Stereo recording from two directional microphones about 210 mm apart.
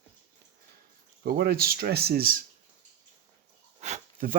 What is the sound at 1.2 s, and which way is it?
Speech, 50° right (ahead or behind).